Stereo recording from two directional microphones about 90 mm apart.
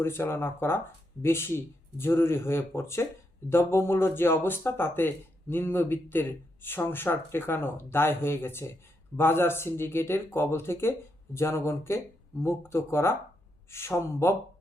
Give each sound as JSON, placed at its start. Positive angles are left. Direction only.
{"t": 0.0, "sound": "speech", "side_deg": 25}